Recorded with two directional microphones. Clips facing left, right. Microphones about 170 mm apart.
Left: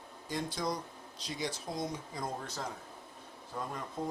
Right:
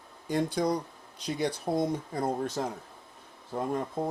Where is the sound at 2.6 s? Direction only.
45° right (ahead or behind).